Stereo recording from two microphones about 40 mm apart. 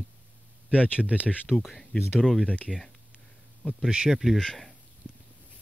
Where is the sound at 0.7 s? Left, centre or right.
Right.